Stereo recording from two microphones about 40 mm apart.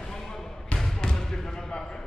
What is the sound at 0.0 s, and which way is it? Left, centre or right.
Basketball bounce, centre.